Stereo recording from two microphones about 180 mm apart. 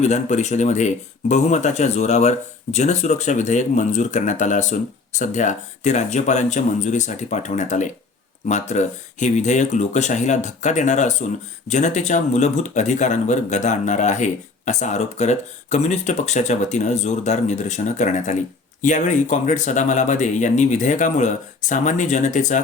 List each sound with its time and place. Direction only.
0.0 s speech: 40° left (ahead or behind)